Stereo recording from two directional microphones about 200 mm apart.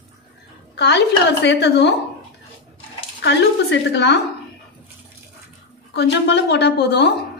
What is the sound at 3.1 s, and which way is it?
A woman's voice, 60° left (ahead or behind).